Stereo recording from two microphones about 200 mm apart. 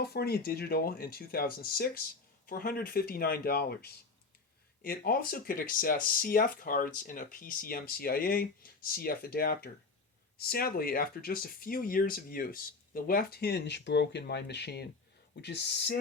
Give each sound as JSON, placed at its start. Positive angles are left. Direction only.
{"t": 0.0, "sound": "speech", "side_deg": 55}